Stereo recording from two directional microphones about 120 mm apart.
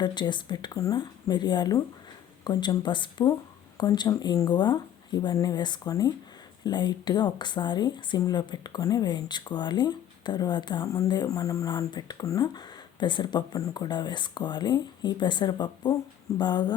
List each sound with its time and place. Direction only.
0.0 s speech: 40° left (ahead or behind)